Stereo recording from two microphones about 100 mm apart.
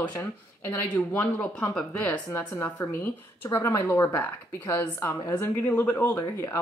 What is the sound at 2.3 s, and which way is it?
A woman's voice, 25° left (ahead or behind).